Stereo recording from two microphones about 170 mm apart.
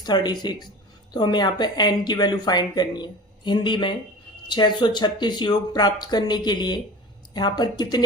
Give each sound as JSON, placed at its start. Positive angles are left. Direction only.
{"t": 0.0, "sound": "speech", "side_deg": 25}